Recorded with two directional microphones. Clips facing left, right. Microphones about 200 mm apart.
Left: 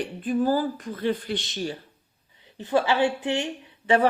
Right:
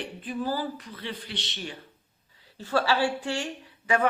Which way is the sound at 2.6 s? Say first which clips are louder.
Left 3 dB; 20° left (ahead or behind).